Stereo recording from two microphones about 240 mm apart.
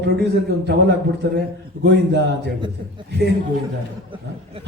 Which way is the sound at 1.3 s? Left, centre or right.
Right.